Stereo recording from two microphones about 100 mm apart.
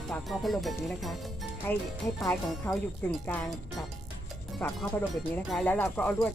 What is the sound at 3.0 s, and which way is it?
Speech, 20° left (ahead or behind).